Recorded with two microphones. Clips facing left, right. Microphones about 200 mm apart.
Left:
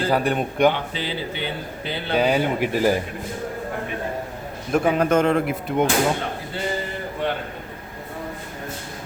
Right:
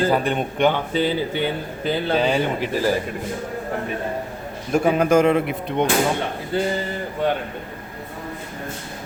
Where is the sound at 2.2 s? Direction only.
10° left (ahead or behind).